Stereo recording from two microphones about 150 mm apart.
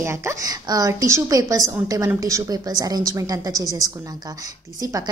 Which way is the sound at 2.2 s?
20° right (ahead or behind).